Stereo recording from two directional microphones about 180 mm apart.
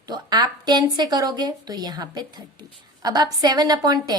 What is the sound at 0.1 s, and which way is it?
A woman's voice, 20° right (ahead or behind).